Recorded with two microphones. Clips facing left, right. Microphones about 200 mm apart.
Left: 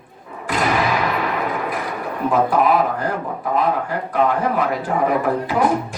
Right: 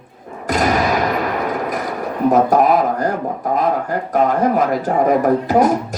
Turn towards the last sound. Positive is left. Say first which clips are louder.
# right 5 dB
turn(degrees=-40)  # may be behind; listen again after turning